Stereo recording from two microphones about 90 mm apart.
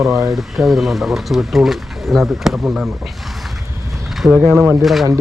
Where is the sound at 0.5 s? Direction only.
Centre (ahead or behind).